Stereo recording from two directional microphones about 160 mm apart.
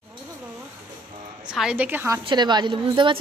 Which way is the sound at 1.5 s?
5° right (ahead or behind).